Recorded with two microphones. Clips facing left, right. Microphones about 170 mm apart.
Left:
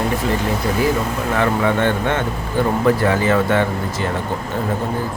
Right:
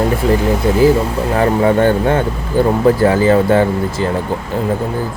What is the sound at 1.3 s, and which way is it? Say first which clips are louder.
Speech: right 5 dB; 35° right (ahead or behind).